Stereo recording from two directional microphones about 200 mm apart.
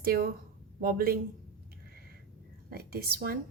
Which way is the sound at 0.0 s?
50° right (ahead or behind).